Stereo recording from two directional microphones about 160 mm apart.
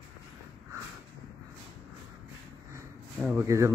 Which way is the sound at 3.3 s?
20° right (ahead or behind).